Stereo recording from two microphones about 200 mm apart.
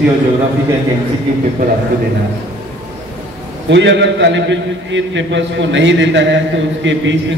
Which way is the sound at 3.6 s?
60° right (ahead or behind).